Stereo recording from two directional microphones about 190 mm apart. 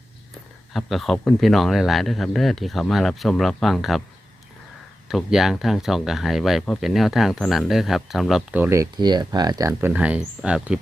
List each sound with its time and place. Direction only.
0.7 s speech: centre (ahead or behind)
5.0 s speech: centre (ahead or behind)
8.5 s speech: 10° right (ahead or behind)